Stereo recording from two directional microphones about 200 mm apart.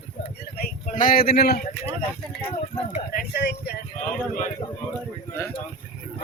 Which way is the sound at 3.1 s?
50° left (ahead or behind).